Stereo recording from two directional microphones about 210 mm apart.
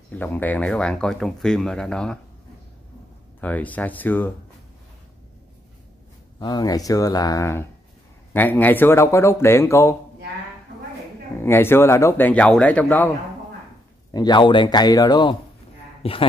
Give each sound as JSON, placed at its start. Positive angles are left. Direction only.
{"t": 0.1, "sound": "speech", "side_deg": 10}
{"t": 3.3, "sound": "speech", "side_deg": 10}
{"t": 6.4, "sound": "speech", "side_deg": 20}
{"t": 11.3, "sound": "speech", "side_deg": 10}
{"t": 14.1, "sound": "a man's voice", "side_deg": 20}